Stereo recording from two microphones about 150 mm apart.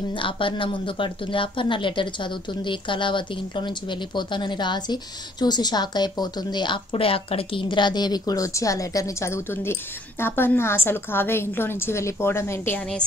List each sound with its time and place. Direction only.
0.1 s a woman's voice: 35° left (ahead or behind); by 13.0 s 10° left (ahead or behind)